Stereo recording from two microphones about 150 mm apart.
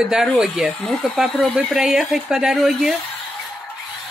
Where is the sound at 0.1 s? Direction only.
5° right (ahead or behind).